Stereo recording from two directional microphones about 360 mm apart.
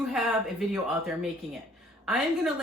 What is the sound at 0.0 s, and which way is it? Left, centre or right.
A woman's voice, centre.